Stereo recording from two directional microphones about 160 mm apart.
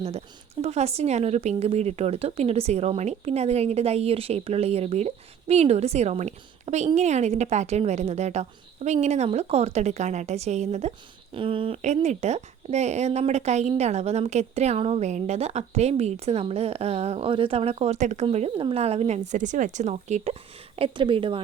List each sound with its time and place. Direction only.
0.6 s speech: 40° right (ahead or behind)
12.0 s speech: 45° right (ahead or behind)
20.7 s speech: 35° right (ahead or behind)